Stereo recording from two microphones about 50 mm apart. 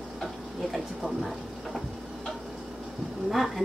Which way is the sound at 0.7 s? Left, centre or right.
Centre.